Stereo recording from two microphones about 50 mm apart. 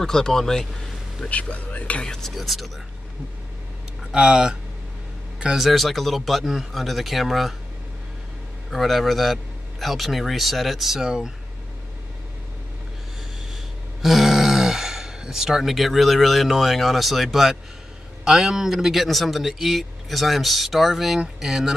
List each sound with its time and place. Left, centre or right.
0.0 s speech: centre
1.3 s speech: left
2.0 s speech: centre
2.3 s a man's voice: centre
4.1 s speech: right
5.4 s a man's voice: centre
8.6 s a man's voice: centre
14.0 s a man's voice: centre